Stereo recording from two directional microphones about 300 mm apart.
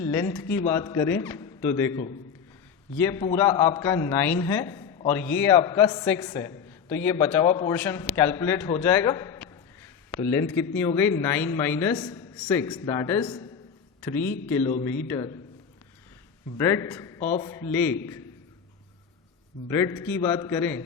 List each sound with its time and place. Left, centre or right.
0.0 s a man's voice: centre
14.6 s a man's voice: centre
16.6 s a man's voice: centre
19.6 s a man's voice: centre